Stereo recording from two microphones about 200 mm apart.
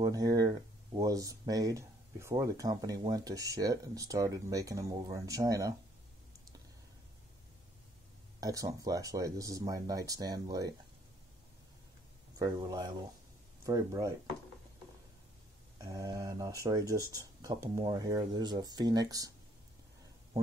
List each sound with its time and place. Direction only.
0.0 s speech: 20° right (ahead or behind)
8.4 s speech: 15° right (ahead or behind)
12.4 s speech: 20° right (ahead or behind)
15.8 s speech: 15° right (ahead or behind)